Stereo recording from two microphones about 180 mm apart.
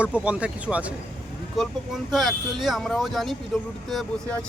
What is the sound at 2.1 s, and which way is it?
Speech, centre (ahead or behind).